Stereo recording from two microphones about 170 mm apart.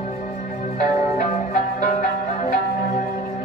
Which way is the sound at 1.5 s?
45° left (ahead or behind).